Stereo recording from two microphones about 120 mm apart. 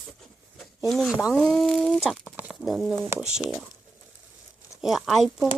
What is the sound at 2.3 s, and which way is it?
Bird, 10° right (ahead or behind).